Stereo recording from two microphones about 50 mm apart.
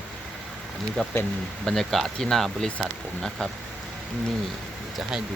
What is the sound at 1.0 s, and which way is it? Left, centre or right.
Speech, centre.